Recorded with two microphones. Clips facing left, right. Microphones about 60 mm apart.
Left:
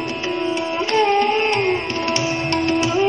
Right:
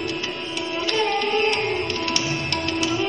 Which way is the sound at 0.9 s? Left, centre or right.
Left.